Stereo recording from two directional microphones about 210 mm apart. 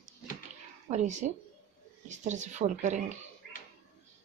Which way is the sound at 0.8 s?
35° right (ahead or behind).